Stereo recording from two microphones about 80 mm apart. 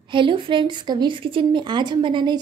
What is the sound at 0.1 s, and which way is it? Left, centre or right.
A woman's voice, right.